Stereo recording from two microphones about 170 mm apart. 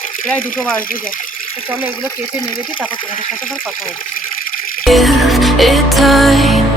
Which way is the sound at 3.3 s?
55° left (ahead or behind).